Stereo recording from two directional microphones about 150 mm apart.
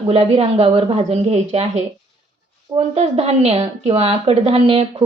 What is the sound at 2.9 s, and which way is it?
A woman's voice, 45° right (ahead or behind).